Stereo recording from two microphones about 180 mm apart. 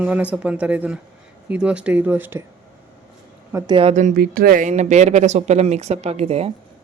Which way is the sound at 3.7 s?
40° right (ahead or behind).